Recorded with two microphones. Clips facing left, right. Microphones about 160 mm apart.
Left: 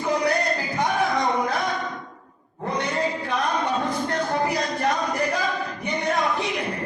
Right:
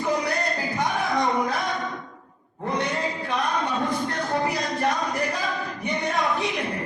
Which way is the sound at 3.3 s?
Centre (ahead or behind).